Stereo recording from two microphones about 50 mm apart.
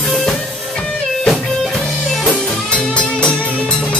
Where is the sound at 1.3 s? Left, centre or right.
Centre.